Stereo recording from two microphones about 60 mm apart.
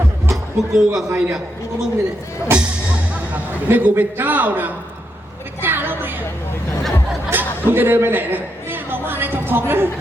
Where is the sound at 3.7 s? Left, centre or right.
Right.